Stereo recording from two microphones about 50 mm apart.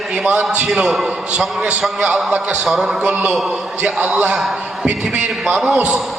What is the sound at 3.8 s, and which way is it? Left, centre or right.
A man's voice, right.